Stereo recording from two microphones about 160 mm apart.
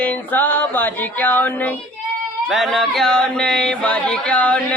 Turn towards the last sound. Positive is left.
turn(degrees=10)  # may be behind; listen again after turning